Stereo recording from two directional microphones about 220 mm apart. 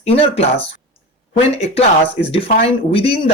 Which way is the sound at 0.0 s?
30° left (ahead or behind).